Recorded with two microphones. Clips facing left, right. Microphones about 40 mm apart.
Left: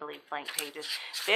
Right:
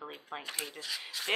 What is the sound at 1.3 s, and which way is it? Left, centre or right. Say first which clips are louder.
Speech: left 5 dB; left.